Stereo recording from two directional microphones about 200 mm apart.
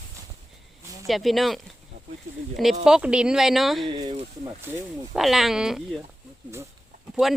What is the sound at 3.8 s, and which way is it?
Speech, 25° right (ahead or behind).